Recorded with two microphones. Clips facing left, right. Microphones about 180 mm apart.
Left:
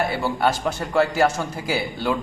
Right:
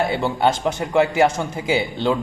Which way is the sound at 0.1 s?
20° right (ahead or behind).